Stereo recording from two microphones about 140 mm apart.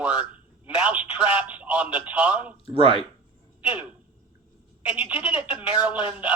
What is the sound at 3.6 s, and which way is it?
Speech, 10° right (ahead or behind).